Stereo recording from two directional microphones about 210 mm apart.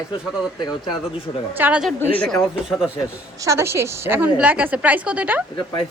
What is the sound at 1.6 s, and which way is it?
Speech, 5° right (ahead or behind).